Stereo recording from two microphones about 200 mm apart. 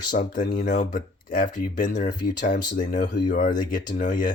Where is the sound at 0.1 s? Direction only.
40° left (ahead or behind).